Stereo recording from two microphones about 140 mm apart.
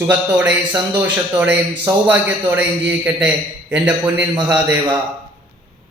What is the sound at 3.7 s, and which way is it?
Speech, 10° right (ahead or behind).